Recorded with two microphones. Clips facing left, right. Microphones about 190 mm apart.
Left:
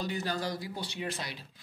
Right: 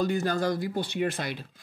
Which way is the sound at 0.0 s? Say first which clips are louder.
Right 8 dB; 50° right (ahead or behind).